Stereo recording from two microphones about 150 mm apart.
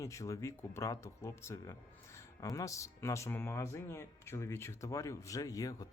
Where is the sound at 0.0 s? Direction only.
20° left (ahead or behind).